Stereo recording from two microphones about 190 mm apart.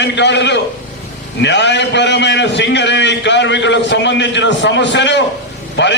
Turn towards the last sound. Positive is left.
turn(degrees=65)  # may be behind; listen again after turning